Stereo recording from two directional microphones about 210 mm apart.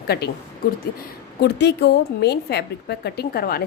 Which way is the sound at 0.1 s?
50° left (ahead or behind).